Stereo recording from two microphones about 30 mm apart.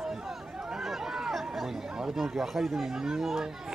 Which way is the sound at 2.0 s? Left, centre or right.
Centre.